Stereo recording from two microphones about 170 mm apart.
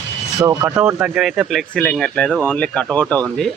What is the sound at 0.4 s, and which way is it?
Speech, 15° right (ahead or behind).